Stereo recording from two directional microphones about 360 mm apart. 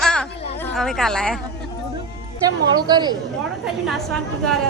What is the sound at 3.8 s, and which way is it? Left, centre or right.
Speech, centre.